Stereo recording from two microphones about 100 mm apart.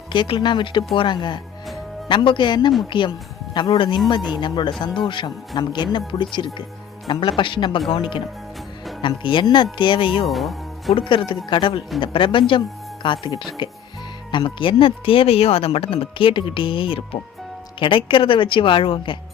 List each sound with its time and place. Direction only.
0.1 s speech: 55° left (ahead or behind)
10.2 s speech: centre (ahead or behind)
10.9 s speech: 55° left (ahead or behind)